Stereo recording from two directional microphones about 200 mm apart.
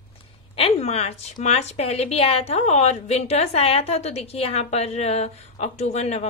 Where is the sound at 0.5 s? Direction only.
30° left (ahead or behind).